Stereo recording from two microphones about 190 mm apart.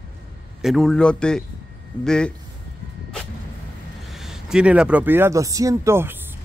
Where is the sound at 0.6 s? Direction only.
Centre (ahead or behind).